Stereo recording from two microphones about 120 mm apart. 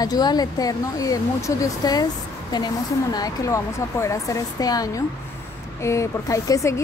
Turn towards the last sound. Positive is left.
turn(degrees=25)  # may be behind; listen again after turning